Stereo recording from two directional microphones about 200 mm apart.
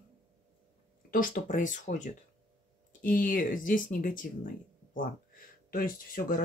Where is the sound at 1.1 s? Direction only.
40° left (ahead or behind).